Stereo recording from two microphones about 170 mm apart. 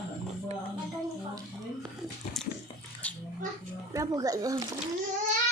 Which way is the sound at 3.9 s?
20° right (ahead or behind).